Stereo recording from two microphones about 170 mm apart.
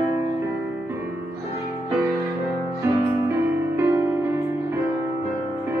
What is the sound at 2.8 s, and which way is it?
Music, 15° right (ahead or behind).